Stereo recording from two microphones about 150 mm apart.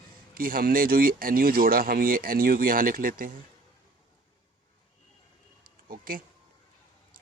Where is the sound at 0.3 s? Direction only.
75° right (ahead or behind).